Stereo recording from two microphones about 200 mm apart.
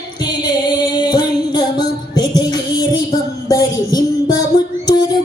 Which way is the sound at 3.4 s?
20° left (ahead or behind).